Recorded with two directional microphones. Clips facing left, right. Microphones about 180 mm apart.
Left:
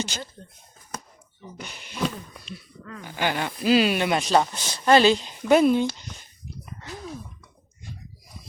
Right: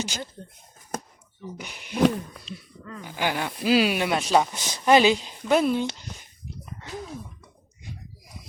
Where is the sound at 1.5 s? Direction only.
10° right (ahead or behind).